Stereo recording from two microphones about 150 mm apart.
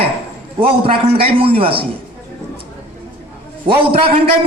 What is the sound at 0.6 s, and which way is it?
A man's voice, 40° right (ahead or behind).